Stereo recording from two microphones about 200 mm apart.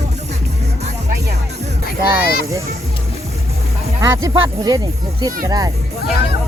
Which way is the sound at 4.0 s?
15° right (ahead or behind).